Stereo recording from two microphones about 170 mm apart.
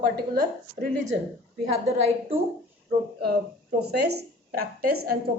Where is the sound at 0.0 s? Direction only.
60° right (ahead or behind).